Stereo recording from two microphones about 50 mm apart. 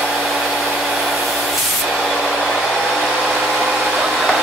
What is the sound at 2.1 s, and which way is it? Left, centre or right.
Vehicle, centre.